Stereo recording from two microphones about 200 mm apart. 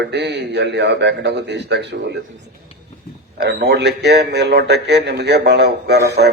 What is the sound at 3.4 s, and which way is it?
A man's voice, 55° right (ahead or behind).